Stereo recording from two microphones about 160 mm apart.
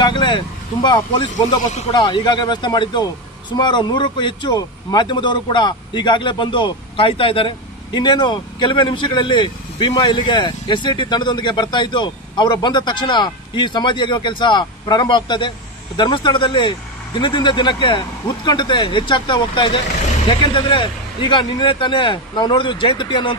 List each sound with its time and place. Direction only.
0.0 s vehicle: 30° left (ahead or behind)
1.9 s a man's voice: 25° left (ahead or behind)